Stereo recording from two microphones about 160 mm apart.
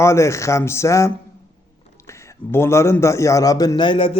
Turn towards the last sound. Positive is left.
turn(degrees=30)  # may be behind; listen again after turning